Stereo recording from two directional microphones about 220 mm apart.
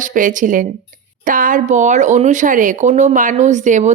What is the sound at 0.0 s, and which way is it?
Speech, 35° right (ahead or behind).